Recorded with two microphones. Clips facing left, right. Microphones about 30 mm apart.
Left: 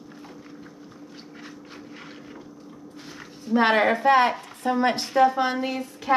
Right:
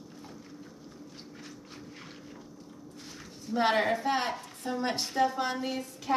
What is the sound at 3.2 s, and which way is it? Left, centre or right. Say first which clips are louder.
Speech: left 8 dB; left.